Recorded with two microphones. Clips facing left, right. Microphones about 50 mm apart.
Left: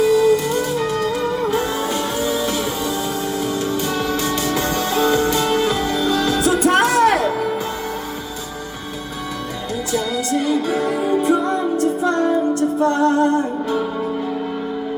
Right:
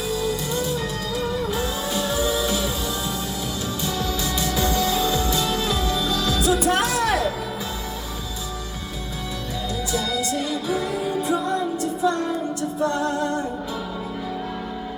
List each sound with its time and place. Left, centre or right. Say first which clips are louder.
0.0 s music: left 11 dB; left
3.7 s music: left 6 dB; left
9.9 s music: left 5 dB; left